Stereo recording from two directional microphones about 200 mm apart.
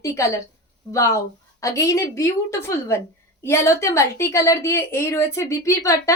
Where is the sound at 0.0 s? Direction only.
15° left (ahead or behind).